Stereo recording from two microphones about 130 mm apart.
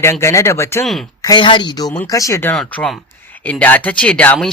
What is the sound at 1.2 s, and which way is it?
Speech, 35° left (ahead or behind).